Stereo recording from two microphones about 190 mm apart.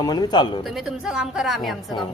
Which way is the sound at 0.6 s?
Centre (ahead or behind).